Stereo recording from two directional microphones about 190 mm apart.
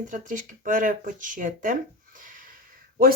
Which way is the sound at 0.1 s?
40° right (ahead or behind).